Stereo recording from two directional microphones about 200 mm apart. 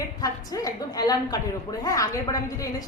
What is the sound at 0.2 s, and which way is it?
A woman's voice, 15° left (ahead or behind).